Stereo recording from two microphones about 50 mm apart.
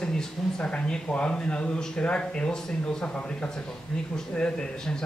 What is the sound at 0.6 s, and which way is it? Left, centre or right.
Speech, left.